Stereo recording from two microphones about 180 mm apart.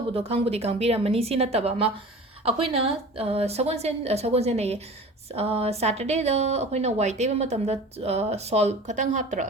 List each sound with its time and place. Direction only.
0.1 s speech: 30° right (ahead or behind)